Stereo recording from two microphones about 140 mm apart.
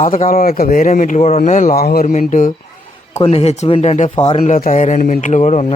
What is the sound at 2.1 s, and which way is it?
Speech, 60° left (ahead or behind).